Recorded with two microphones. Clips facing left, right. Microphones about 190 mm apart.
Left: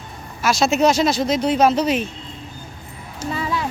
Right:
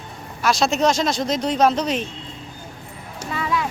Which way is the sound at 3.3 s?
30° left (ahead or behind).